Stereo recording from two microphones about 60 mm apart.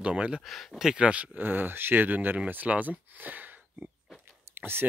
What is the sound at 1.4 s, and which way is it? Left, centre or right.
Speech, right.